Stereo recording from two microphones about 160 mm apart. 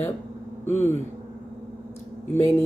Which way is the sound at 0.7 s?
15° left (ahead or behind).